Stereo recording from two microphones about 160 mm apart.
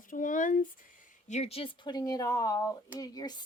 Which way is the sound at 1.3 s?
40° left (ahead or behind).